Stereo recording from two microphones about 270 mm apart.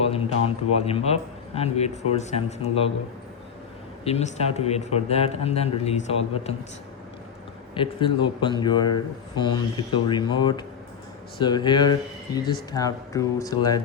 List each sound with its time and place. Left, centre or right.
0.1 s speech: left
4.0 s speech: left
7.8 s speech: centre